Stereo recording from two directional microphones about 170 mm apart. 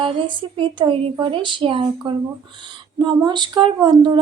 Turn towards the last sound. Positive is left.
turn(degrees=-25)  # may be behind; listen again after turning